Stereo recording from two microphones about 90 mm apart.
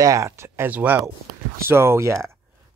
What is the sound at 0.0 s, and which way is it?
Speech, 35° right (ahead or behind).